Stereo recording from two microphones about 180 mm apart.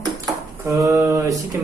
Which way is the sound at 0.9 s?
20° right (ahead or behind).